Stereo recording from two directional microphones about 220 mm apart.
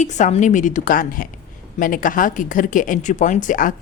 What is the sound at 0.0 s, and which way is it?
Speech, 35° left (ahead or behind).